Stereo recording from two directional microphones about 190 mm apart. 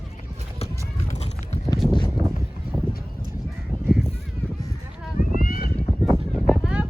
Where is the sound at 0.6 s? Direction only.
35° left (ahead or behind).